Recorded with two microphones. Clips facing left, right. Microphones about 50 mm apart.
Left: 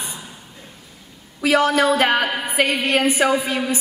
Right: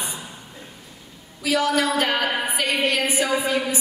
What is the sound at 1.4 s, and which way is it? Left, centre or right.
Speech, left.